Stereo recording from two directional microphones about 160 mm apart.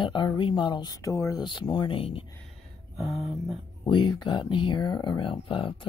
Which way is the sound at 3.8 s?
30° left (ahead or behind).